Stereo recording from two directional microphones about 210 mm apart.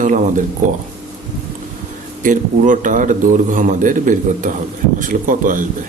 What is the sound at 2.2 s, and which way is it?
A man's voice, 35° right (ahead or behind).